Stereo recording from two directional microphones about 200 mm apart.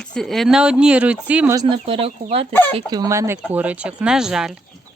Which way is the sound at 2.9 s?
20° right (ahead or behind).